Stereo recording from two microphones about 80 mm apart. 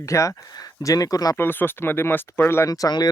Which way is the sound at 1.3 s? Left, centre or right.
Left.